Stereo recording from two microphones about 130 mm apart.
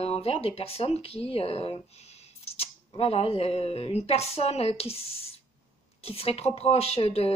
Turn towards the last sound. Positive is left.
turn(degrees=50)  # may be behind; listen again after turning